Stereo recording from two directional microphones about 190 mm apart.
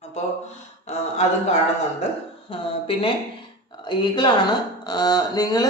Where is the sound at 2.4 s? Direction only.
30° left (ahead or behind).